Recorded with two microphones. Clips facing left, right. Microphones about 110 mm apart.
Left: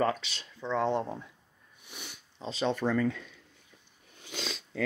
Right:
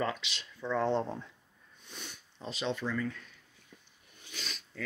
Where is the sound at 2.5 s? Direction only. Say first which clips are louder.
Left 5 dB; 45° left (ahead or behind).